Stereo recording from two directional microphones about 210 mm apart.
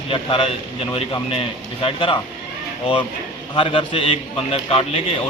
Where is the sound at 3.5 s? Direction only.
25° left (ahead or behind).